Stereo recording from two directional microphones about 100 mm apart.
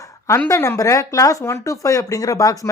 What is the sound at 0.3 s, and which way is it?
Speech, 30° left (ahead or behind).